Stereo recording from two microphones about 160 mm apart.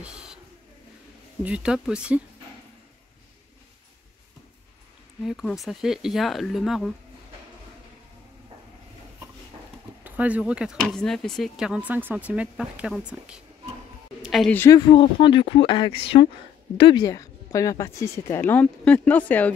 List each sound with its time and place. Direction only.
0.0 s bird: 5° right (ahead or behind)
1.4 s speech: 5° right (ahead or behind)
5.2 s speech: centre (ahead or behind)
10.0 s speech: 10° right (ahead or behind)
14.2 s a sound: centre (ahead or behind)
14.5 s speech: 15° left (ahead or behind)
14.8 s speech: 30° left (ahead or behind)
17.0 s speech: 20° left (ahead or behind)